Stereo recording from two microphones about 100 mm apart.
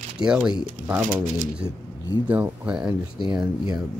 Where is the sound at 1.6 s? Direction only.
40° right (ahead or behind).